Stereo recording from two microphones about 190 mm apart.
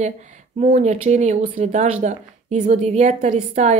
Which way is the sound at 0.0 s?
40° right (ahead or behind).